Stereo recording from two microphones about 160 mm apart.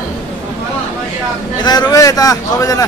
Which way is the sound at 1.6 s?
25° left (ahead or behind).